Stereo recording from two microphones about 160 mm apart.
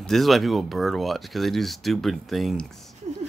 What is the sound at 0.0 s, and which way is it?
Speech, centre (ahead or behind).